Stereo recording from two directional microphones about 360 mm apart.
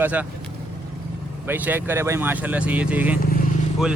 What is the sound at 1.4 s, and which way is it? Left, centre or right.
Speech, centre.